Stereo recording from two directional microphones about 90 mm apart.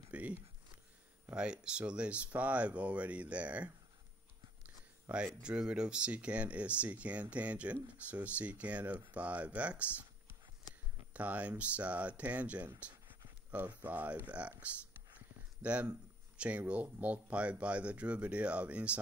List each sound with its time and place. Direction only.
0.1 s a sound: 15° right (ahead or behind)
1.3 s speech: 10° right (ahead or behind)
5.1 s speech: 10° right (ahead or behind)
11.1 s speech: 15° right (ahead or behind)
15.6 s speech: 15° right (ahead or behind)